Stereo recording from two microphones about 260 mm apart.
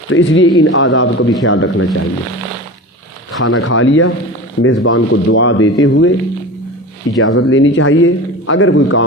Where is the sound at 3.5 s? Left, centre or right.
Left.